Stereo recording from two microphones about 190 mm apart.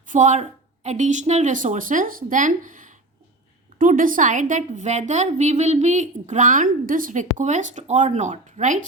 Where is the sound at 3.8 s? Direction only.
45° right (ahead or behind).